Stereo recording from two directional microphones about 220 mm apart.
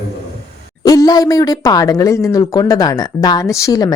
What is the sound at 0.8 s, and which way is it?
Speech, 15° left (ahead or behind).